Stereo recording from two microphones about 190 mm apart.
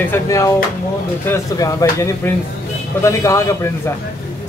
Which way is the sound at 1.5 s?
15° left (ahead or behind).